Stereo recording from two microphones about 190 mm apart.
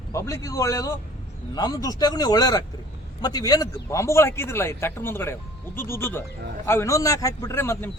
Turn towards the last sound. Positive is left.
turn(degrees=15)  # may be behind; listen again after turning